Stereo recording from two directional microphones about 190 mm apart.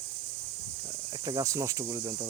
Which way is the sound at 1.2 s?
20° right (ahead or behind).